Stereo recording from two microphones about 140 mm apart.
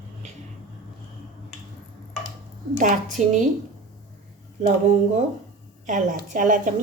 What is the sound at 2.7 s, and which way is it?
Speech, 65° right (ahead or behind).